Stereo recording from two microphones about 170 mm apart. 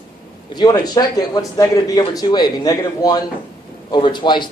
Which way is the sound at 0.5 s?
25° left (ahead or behind).